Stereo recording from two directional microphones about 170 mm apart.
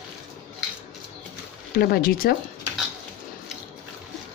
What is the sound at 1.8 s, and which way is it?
Speech, 60° left (ahead or behind).